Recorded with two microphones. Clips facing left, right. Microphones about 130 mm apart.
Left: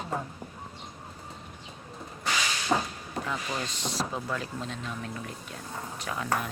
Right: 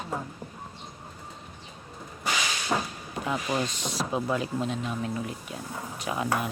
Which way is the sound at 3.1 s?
15° right (ahead or behind).